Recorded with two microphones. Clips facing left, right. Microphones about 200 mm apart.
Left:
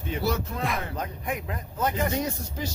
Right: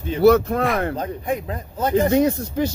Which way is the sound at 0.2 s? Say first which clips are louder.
Right 16 dB; 60° right (ahead or behind).